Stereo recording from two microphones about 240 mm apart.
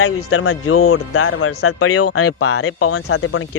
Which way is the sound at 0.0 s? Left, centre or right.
Left.